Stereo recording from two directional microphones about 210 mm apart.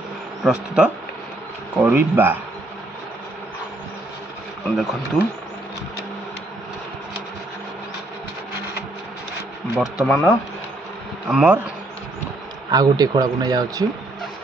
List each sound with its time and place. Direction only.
0.4 s speech: 5° right (ahead or behind)
4.6 s speech: centre (ahead or behind)
9.8 s speech: centre (ahead or behind)
11.2 s speech: 5° right (ahead or behind)
12.7 s speech: 20° right (ahead or behind)